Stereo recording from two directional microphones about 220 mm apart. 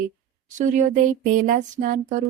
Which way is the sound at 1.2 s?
35° right (ahead or behind).